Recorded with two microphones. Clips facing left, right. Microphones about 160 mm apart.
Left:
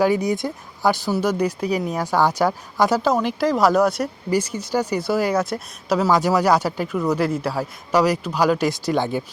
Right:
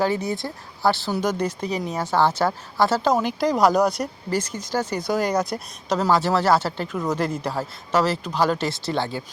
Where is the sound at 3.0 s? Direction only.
Centre (ahead or behind).